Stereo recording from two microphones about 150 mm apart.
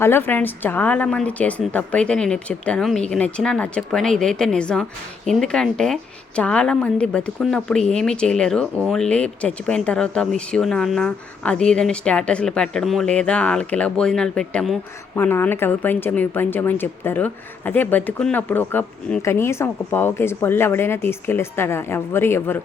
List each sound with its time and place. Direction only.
0.0 s speech: 15° left (ahead or behind)
15.1 s speech: 15° left (ahead or behind)